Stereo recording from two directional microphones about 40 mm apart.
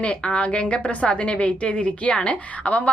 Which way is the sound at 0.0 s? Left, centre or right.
Left.